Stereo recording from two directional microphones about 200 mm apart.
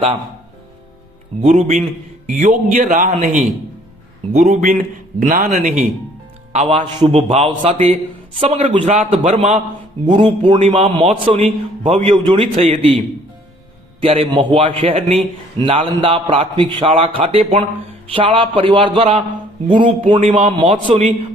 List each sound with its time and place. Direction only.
1.4 s a man's voice: 35° right (ahead or behind)
10.6 s a man's voice: 35° right (ahead or behind)
14.0 s a man's voice: 30° right (ahead or behind)